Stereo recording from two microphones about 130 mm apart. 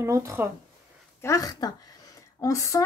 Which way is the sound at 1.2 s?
25° left (ahead or behind).